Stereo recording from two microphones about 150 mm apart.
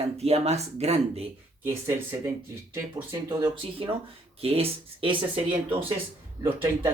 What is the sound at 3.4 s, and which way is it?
Speech, 35° right (ahead or behind).